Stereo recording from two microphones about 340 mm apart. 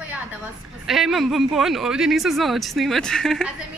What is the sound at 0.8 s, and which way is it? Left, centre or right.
Speech, centre.